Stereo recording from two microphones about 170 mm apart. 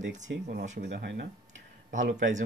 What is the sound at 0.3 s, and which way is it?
Speech, 65° right (ahead or behind).